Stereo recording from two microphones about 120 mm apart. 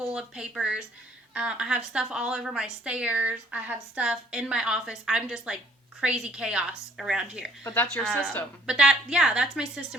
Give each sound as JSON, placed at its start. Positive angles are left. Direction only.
{"t": 0.1, "sound": "a woman's voice", "side_deg": -5}
{"t": 7.6, "sound": "speech", "side_deg": 15}
{"t": 7.9, "sound": "speech", "side_deg": 5}
{"t": 8.6, "sound": "a woman's voice", "side_deg": -10}